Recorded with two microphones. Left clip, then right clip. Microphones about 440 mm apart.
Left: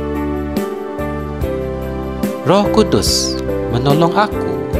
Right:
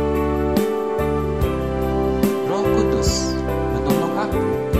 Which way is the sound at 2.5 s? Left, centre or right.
Left.